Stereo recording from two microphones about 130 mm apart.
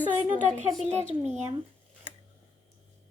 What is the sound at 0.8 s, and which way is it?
Speech, 60° right (ahead or behind).